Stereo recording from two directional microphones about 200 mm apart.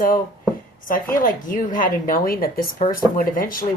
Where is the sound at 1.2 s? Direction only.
45° left (ahead or behind).